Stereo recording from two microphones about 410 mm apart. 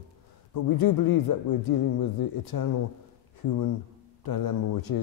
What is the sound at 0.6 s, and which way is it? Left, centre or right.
Speech, left.